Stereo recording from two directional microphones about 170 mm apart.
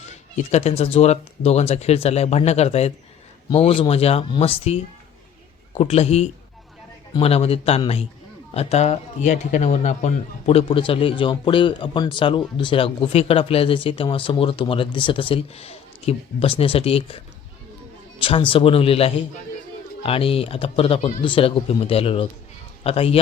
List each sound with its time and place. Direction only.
0.0 s a man's voice: 40° left (ahead or behind)
18.2 s a man's voice: 30° left (ahead or behind)